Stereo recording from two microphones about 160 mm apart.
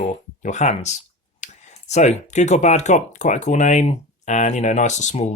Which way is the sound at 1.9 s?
45° left (ahead or behind).